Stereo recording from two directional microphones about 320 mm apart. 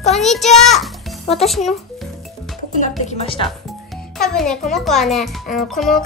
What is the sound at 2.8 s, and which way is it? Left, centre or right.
Speech, centre.